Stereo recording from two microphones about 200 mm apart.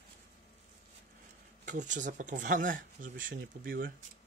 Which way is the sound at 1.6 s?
40° right (ahead or behind).